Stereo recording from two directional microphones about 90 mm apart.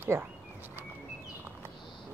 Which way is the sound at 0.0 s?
25° right (ahead or behind).